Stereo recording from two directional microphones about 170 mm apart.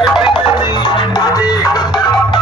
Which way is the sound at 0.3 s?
25° left (ahead or behind).